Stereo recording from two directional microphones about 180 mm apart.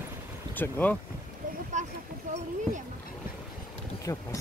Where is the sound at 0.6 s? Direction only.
10° left (ahead or behind).